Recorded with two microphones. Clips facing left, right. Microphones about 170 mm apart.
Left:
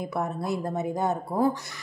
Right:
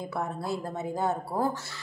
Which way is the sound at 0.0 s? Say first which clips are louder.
Left 3 dB; 20° left (ahead or behind).